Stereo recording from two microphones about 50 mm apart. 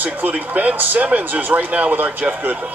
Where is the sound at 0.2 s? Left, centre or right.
Right.